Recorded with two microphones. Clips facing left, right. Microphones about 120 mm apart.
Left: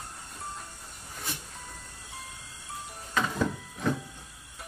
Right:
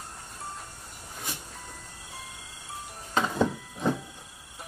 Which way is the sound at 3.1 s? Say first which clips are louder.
Right 3 dB; 25° right (ahead or behind).